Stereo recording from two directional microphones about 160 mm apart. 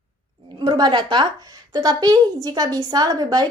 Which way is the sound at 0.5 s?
25° right (ahead or behind).